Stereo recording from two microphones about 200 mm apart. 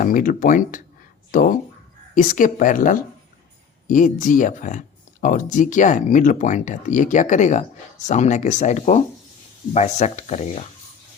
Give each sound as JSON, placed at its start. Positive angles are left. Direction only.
{"t": 0.0, "sound": "speech", "side_deg": 45}